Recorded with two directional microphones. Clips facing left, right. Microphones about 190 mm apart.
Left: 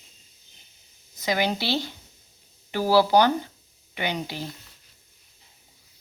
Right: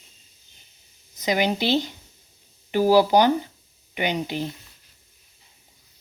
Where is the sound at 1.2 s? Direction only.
20° right (ahead or behind).